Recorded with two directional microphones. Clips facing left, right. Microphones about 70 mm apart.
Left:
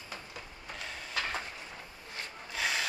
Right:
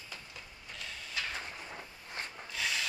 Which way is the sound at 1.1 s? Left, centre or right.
Left.